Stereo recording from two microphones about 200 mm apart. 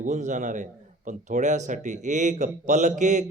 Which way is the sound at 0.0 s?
40° right (ahead or behind).